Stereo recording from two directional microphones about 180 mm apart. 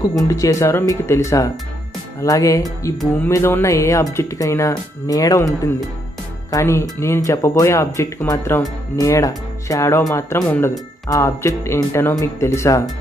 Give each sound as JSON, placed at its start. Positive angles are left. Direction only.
{"t": 0.2, "sound": "speech", "side_deg": 20}